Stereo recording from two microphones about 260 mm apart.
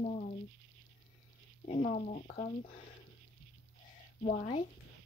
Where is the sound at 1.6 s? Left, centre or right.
Left.